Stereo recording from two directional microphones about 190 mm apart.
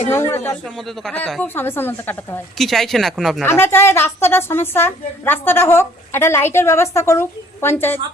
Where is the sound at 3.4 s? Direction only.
10° left (ahead or behind).